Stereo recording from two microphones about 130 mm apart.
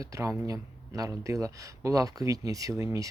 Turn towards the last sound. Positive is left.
turn(degrees=-20)  # may be behind; listen again after turning